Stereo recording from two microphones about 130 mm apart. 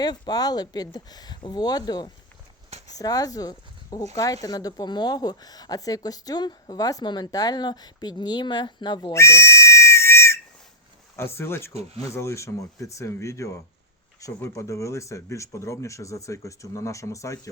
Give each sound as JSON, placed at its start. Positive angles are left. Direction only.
{"t": 0.0, "sound": "speech", "side_deg": 30}
{"t": 9.1, "sound": "whistle", "side_deg": 20}
{"t": 11.2, "sound": "speech", "side_deg": 20}
{"t": 11.7, "sound": "speech", "side_deg": -55}
{"t": 12.1, "sound": "speech", "side_deg": 20}